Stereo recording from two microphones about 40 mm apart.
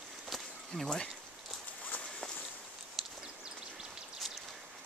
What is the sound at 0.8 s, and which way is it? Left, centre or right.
Speech, centre.